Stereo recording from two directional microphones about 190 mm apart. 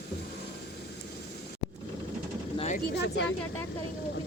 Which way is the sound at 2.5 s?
35° left (ahead or behind).